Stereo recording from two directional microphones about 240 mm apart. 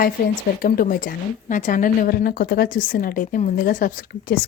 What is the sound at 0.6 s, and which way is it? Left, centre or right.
A woman's voice, left.